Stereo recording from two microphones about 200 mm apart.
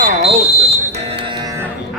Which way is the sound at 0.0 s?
30° right (ahead or behind).